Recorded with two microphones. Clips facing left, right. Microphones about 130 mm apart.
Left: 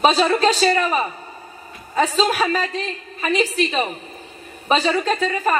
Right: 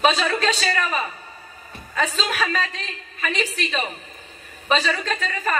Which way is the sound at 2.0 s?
35° left (ahead or behind).